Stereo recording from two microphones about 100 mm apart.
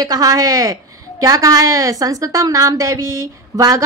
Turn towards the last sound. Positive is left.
turn(degrees=-35)  # may be behind; listen again after turning